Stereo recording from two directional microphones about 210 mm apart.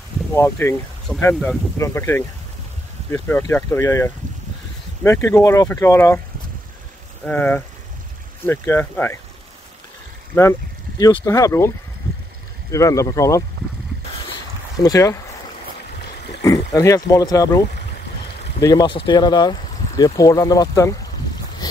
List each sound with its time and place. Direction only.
0.3 s speech: 10° left (ahead or behind)
7.2 s speech: 10° left (ahead or behind)
11.0 s speech: 15° left (ahead or behind)
12.7 s speech: 15° left (ahead or behind)
14.8 s speech: 15° left (ahead or behind)
16.3 s speech: 20° left (ahead or behind)